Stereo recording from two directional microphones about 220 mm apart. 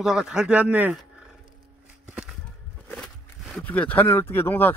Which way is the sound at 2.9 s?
Centre (ahead or behind).